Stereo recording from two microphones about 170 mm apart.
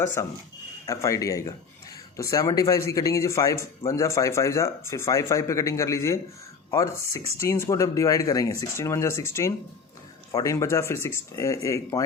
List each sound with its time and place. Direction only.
0.2 s speech: 15° left (ahead or behind)